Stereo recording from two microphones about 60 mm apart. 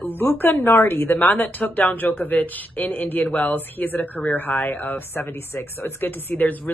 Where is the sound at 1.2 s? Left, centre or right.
Left.